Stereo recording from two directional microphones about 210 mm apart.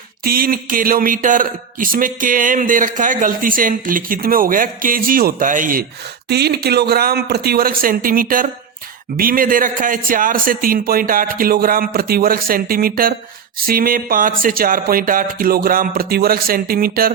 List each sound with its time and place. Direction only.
0.3 s a man's voice: 45° right (ahead or behind)
6.2 s a man's voice: 50° right (ahead or behind)